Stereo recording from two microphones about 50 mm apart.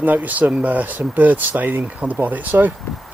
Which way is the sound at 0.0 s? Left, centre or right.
Right.